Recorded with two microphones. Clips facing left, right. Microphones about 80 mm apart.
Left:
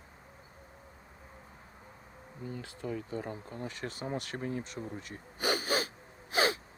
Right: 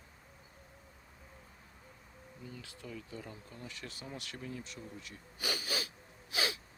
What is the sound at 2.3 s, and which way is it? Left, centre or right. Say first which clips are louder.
Speech: left 8 dB; left.